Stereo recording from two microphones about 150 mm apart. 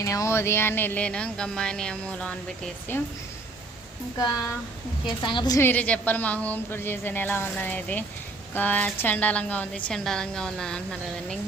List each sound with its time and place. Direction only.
0.0 s a woman's voice: 20° left (ahead or behind)
4.2 s speech: 20° left (ahead or behind)
5.0 s a woman's voice: 30° left (ahead or behind)
5.5 s a woman's voice: 10° left (ahead or behind)